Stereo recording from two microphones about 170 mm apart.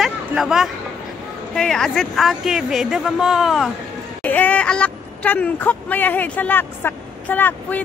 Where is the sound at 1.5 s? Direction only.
5° left (ahead or behind).